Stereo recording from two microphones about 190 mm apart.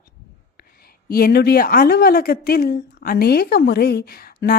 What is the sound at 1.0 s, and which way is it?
A woman's voice, 55° left (ahead or behind).